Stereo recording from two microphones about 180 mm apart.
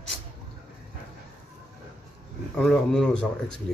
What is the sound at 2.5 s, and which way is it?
Speech, 5° left (ahead or behind).